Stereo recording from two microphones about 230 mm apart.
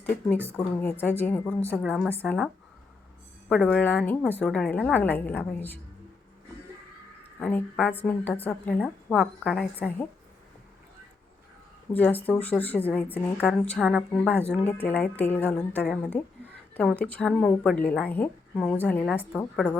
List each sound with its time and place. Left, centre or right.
0.5 s a woman's voice: centre
3.5 s a woman's voice: centre
7.3 s a woman's voice: centre
11.9 s a woman's voice: centre
17.0 s a woman's voice: centre